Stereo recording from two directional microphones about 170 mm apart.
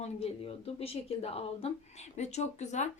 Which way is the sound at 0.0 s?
35° left (ahead or behind).